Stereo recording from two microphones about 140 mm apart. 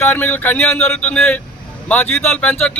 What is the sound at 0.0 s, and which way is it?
A man's voice, 15° left (ahead or behind).